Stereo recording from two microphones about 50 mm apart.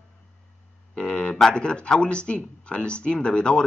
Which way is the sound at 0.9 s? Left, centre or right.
Centre.